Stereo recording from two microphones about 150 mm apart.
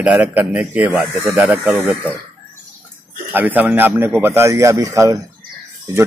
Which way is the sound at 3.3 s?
10° right (ahead or behind).